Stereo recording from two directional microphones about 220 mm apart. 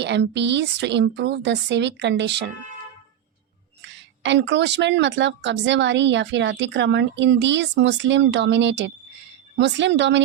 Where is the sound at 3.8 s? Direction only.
55° right (ahead or behind).